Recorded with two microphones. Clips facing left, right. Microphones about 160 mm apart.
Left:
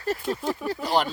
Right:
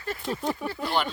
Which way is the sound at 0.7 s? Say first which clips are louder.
Left 6 dB; 40° left (ahead or behind).